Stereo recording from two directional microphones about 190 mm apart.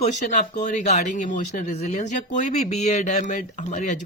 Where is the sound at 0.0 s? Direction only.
40° left (ahead or behind).